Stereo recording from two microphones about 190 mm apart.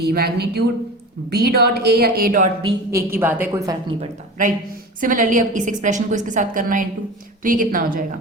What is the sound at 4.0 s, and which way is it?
A woman's voice, 45° right (ahead or behind).